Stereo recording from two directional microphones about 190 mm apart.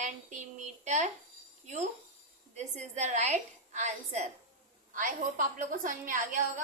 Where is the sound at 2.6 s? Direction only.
35° right (ahead or behind).